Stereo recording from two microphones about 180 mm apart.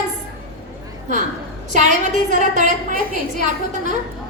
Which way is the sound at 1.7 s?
40° right (ahead or behind).